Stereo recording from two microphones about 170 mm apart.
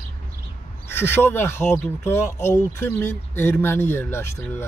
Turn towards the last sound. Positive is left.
turn(degrees=15)  # may be behind; listen again after turning